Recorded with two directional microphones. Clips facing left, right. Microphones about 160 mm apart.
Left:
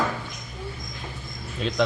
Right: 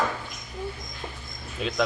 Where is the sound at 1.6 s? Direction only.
5° right (ahead or behind).